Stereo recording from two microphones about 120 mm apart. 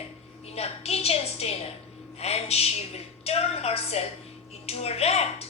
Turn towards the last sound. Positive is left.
turn(degrees=60)  # may be behind; listen again after turning